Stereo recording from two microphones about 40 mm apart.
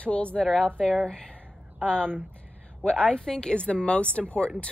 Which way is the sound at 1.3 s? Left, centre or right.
Right.